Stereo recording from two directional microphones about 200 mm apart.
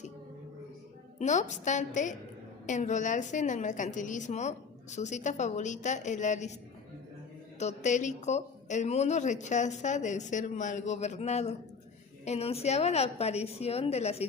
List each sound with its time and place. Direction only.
1.2 s speech: 35° left (ahead or behind)
7.6 s speech: 35° left (ahead or behind)